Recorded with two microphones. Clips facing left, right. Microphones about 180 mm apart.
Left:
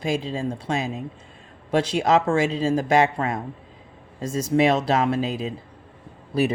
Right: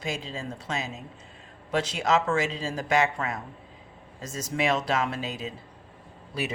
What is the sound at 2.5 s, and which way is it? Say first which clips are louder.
Speech: left 10 dB; 45° left (ahead or behind).